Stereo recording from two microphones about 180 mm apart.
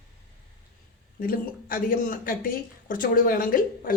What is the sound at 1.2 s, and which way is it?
Speech, 55° left (ahead or behind).